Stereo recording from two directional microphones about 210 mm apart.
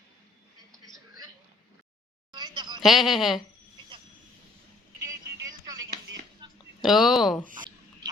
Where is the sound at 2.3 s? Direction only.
20° right (ahead or behind).